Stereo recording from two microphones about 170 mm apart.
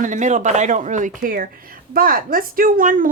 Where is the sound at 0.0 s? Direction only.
45° right (ahead or behind).